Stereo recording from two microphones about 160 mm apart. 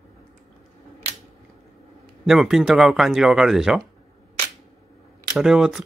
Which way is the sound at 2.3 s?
5° right (ahead or behind).